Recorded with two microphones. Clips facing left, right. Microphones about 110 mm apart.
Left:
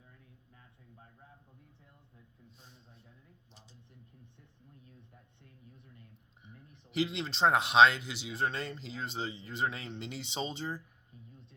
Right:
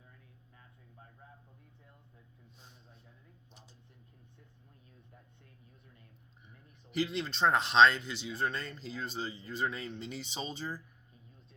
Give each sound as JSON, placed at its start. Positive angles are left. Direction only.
{"t": 6.4, "sound": "speech", "side_deg": 20}